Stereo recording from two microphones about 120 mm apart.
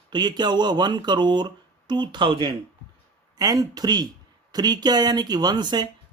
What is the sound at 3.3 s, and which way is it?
Speech, 30° right (ahead or behind).